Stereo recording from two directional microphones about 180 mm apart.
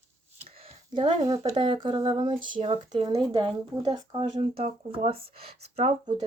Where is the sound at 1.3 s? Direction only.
20° right (ahead or behind).